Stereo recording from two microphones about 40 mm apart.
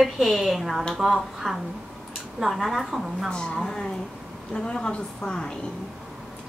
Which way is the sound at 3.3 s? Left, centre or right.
Left.